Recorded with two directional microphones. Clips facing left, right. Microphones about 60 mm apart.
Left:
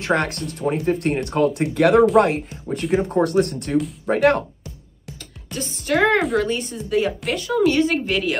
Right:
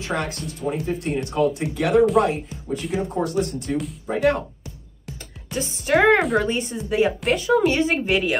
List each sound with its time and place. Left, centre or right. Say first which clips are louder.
0.0 s speech: left 5 dB; left
5.5 s speech: right 2 dB; centre
6.1 s speech: even; centre
6.4 s speech: even; centre
7.1 s speech: right 4 dB; centre